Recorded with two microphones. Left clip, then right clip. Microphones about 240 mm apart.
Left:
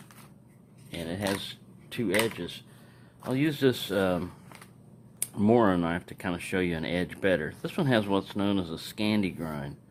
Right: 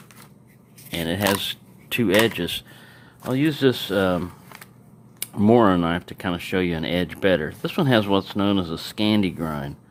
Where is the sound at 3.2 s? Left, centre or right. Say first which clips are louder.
Right 6 dB; centre.